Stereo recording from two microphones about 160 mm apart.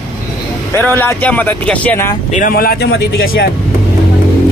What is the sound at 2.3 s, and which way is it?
Speech, 55° left (ahead or behind).